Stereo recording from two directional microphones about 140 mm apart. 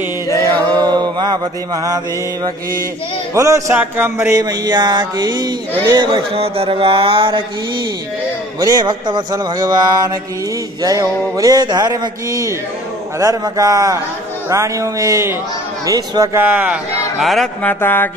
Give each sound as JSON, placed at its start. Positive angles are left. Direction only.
{"t": 0.7, "sound": "mantra", "side_deg": -30}
{"t": 3.3, "sound": "speech", "side_deg": -20}
{"t": 8.5, "sound": "a man's voice", "side_deg": -25}
{"t": 17.2, "sound": "speech", "side_deg": 0}
{"t": 17.6, "sound": "music", "side_deg": 15}